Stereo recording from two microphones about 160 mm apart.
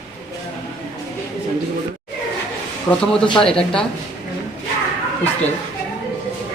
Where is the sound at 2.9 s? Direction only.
15° left (ahead or behind).